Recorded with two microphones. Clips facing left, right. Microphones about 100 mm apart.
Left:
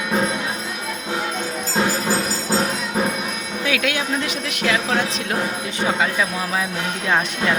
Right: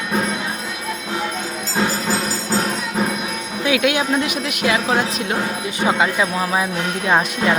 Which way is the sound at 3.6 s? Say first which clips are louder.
Right 5 dB; 15° right (ahead or behind).